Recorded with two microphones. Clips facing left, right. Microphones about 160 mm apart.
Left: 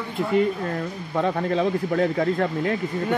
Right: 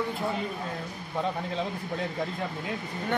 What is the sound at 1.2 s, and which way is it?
Speech, 70° left (ahead or behind).